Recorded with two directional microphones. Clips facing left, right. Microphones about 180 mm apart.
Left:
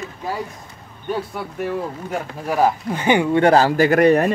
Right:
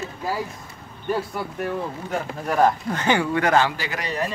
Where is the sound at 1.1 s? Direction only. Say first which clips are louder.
Even; centre (ahead or behind).